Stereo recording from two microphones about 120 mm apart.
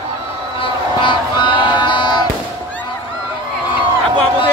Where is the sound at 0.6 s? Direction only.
40° left (ahead or behind).